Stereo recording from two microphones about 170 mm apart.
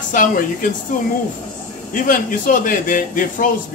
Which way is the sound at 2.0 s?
50° left (ahead or behind).